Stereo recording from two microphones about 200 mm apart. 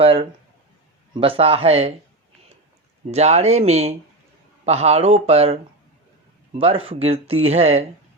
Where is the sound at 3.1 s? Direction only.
35° right (ahead or behind).